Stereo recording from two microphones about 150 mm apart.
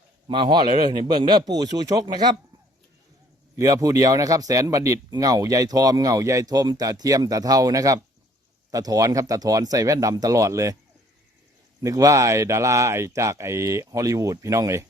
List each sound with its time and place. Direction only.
0.3 s a man's voice: 30° right (ahead or behind)
3.5 s a man's voice: 25° right (ahead or behind)
11.8 s a man's voice: 25° right (ahead or behind)